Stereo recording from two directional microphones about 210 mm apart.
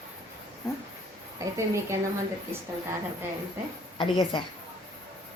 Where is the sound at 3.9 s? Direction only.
20° left (ahead or behind).